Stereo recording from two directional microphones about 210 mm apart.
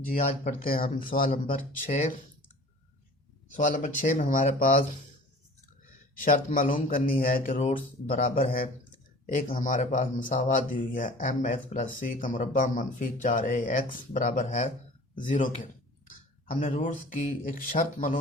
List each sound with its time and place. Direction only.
0.2 s speech: 40° left (ahead or behind)
3.5 s speech: 40° left (ahead or behind)
6.2 s speech: 40° left (ahead or behind)